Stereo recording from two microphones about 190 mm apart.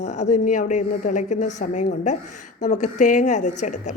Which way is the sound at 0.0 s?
40° left (ahead or behind).